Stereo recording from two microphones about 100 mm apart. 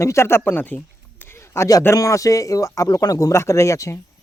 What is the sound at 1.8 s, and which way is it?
Speech, 30° left (ahead or behind).